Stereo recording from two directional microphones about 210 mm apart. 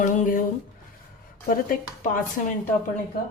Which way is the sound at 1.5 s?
40° left (ahead or behind).